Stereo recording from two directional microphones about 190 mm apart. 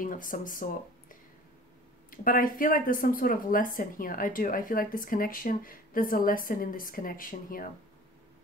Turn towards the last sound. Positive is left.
turn(degrees=45)  # may be behind; listen again after turning